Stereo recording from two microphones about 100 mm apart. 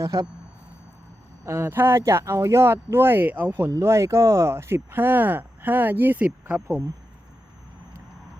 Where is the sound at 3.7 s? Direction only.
30° right (ahead or behind).